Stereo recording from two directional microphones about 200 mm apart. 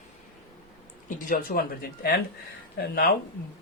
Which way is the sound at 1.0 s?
40° left (ahead or behind).